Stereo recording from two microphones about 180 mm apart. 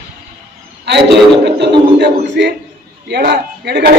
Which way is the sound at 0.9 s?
70° right (ahead or behind).